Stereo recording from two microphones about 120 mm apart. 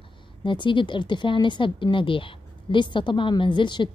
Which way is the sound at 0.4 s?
40° left (ahead or behind).